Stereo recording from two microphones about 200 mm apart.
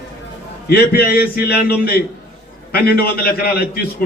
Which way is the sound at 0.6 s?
50° left (ahead or behind).